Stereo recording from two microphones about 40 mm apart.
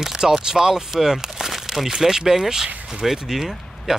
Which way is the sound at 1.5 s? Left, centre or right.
Centre.